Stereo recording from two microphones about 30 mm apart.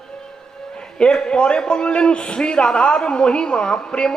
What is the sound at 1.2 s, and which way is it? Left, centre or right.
A man's voice, left.